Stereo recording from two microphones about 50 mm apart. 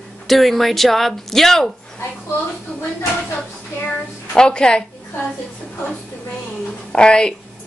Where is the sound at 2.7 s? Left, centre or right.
Left.